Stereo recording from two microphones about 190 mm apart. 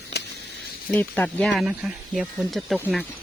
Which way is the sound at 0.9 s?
10° left (ahead or behind).